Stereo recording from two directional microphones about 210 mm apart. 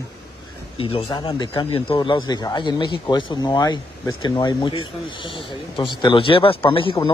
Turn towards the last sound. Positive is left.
turn(degrees=25)  # may be behind; listen again after turning